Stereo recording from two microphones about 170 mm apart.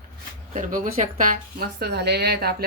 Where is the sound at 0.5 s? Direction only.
50° right (ahead or behind).